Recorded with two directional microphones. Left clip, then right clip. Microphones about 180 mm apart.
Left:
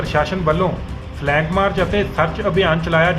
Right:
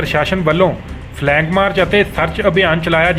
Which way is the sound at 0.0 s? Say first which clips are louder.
Right 3 dB; 35° right (ahead or behind).